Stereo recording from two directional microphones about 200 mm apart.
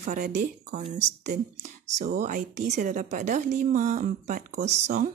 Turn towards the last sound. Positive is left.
turn(degrees=-35)  # may be behind; listen again after turning